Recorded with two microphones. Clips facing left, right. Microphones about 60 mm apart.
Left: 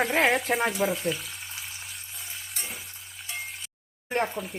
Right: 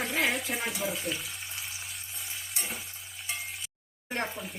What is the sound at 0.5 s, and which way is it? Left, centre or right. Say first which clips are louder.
Speech: left 8 dB; left.